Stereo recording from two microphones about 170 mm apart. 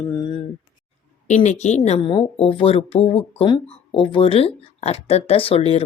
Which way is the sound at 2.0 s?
30° left (ahead or behind).